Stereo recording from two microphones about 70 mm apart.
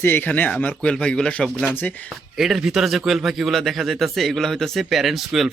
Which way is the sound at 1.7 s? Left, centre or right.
Left.